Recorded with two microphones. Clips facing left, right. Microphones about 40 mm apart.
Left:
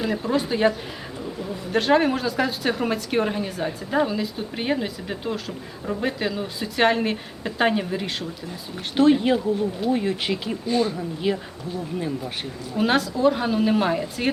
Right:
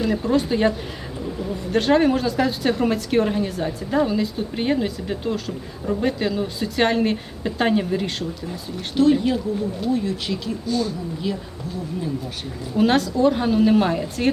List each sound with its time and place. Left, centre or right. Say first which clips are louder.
0.0 s speech: right 3 dB; centre
1.7 s speech: right 2 dB; centre
9.0 s speech: even; left
12.7 s speech: right 3 dB; centre